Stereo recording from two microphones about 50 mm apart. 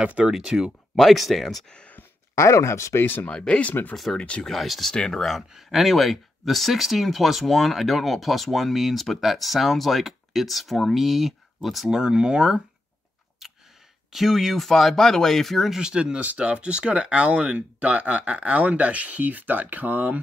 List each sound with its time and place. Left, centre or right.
0.0 s speech: right
0.3 s speech: centre
1.7 s speech: left
2.3 s speech: left
3.3 s speech: left
3.9 s speech: centre
4.2 s speech: centre
4.5 s speech: centre
4.9 s speech: centre
5.5 s speech: centre
12.0 s speech: centre
13.4 s a sound: centre
14.1 s speech: centre
15.8 s speech: centre; by 20.2 s right